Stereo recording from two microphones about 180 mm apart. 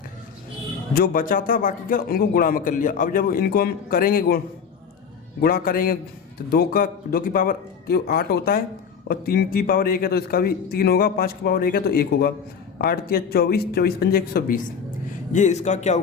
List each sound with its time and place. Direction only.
0.9 s a man's voice: 50° left (ahead or behind)
5.4 s a man's voice: 55° left (ahead or behind)
15.3 s speech: 40° left (ahead or behind)